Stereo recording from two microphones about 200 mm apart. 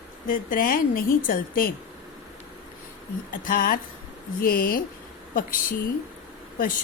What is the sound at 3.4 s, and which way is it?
A woman's voice, 45° left (ahead or behind).